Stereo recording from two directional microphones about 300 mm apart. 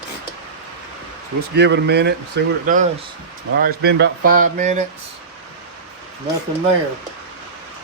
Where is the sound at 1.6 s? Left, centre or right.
Right.